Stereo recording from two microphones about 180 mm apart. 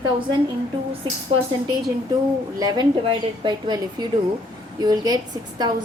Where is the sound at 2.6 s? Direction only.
25° right (ahead or behind).